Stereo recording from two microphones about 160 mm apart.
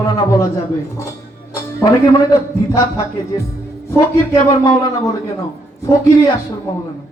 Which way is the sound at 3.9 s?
25° left (ahead or behind).